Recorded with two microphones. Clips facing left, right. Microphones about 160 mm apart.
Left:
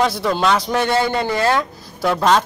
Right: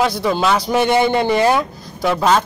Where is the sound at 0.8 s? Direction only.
20° right (ahead or behind).